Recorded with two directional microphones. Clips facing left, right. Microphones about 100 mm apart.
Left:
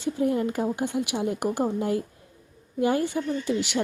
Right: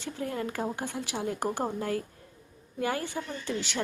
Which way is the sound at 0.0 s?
20° left (ahead or behind).